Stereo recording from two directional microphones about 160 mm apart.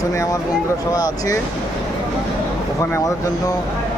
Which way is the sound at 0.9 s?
25° left (ahead or behind).